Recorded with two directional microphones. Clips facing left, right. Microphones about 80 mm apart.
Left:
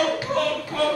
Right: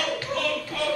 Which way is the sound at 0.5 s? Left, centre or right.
Left.